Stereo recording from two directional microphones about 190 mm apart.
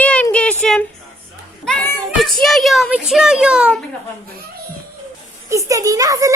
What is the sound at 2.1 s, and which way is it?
A child's voice, centre (ahead or behind).